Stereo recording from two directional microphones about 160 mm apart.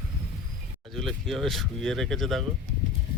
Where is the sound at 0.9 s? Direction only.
Centre (ahead or behind).